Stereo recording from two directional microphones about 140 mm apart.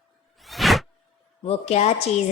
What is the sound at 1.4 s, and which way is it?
Speech, 50° left (ahead or behind).